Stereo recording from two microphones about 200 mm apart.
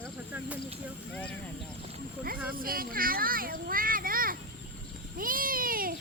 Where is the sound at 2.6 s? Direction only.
45° right (ahead or behind).